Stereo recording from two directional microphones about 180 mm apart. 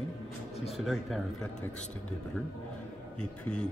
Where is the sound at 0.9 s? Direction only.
Centre (ahead or behind).